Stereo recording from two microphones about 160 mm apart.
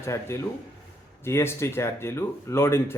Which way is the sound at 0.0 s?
15° left (ahead or behind).